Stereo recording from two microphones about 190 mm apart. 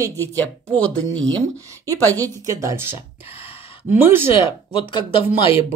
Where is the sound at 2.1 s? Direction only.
15° right (ahead or behind).